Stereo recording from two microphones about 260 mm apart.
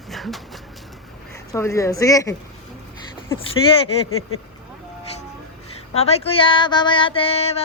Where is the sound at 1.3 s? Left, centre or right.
Centre.